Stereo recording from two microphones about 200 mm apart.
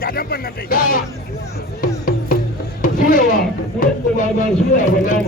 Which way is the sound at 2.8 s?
45° left (ahead or behind).